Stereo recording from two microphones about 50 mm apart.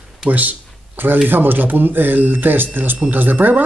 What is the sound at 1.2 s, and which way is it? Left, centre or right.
Speech, right.